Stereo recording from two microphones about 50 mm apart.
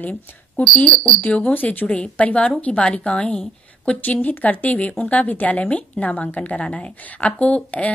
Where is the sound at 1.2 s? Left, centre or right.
Left.